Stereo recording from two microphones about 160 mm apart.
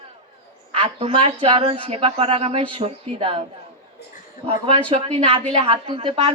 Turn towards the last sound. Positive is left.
turn(degrees=-35)  # may be behind; listen again after turning